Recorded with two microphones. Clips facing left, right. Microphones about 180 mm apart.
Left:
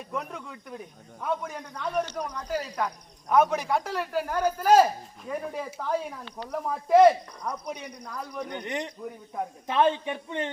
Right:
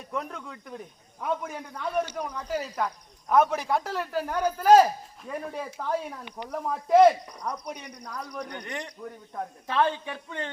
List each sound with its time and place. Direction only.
0.1 s a man's voice: 5° left (ahead or behind)
6.2 s speech: 15° right (ahead or behind)
6.5 s a man's voice: centre (ahead or behind)
8.4 s speech: 20° left (ahead or behind)
9.0 s speech: 10° left (ahead or behind)
9.6 s speech: 20° left (ahead or behind)